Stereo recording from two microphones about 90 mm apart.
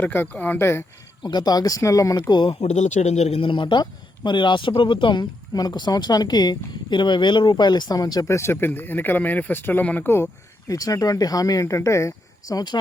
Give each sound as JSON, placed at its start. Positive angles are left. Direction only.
{"t": 0.0, "sound": "speech", "side_deg": 20}
{"t": 1.2, "sound": "speech", "side_deg": 55}
{"t": 2.3, "sound": "speech", "side_deg": 65}
{"t": 8.3, "sound": "speech", "side_deg": 30}
{"t": 10.7, "sound": "speech", "side_deg": 40}
{"t": 12.5, "sound": "speech", "side_deg": 55}